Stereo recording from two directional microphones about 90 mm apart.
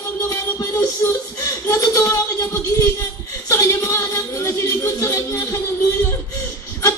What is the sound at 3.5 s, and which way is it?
Music, 30° left (ahead or behind).